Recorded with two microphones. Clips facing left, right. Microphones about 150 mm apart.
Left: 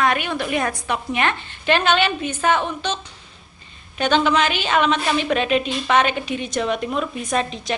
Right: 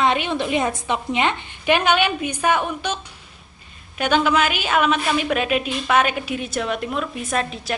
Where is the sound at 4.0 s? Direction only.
5° right (ahead or behind).